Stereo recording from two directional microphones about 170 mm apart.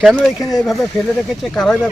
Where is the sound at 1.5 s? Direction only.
Centre (ahead or behind).